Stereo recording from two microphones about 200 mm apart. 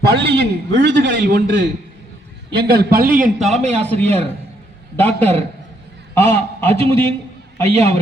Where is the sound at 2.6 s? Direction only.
50° right (ahead or behind).